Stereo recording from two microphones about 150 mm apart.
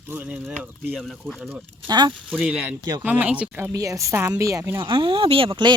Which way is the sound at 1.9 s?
30° right (ahead or behind).